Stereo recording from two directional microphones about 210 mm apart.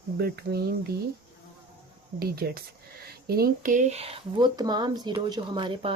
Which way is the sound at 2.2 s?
50° right (ahead or behind).